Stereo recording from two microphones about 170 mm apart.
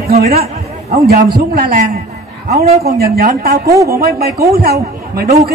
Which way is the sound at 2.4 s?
40° right (ahead or behind).